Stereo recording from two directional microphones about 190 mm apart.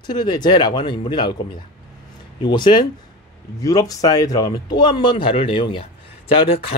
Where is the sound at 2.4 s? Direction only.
25° left (ahead or behind).